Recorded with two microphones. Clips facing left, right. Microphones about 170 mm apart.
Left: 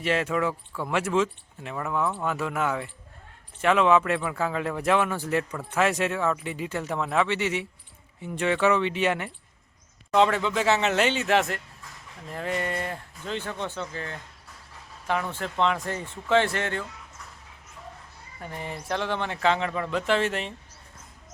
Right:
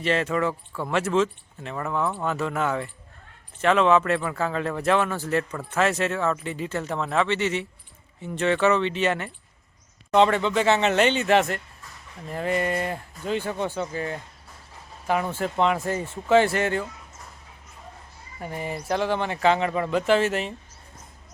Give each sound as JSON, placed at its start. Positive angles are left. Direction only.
{"t": 0.0, "sound": "speech", "side_deg": 10}
{"t": 15.3, "sound": "speech", "side_deg": -10}
{"t": 18.3, "sound": "speech", "side_deg": -10}